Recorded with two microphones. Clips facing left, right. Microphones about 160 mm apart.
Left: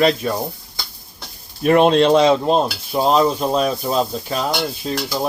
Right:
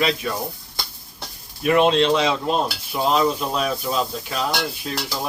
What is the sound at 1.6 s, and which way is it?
Stir, 40° left (ahead or behind).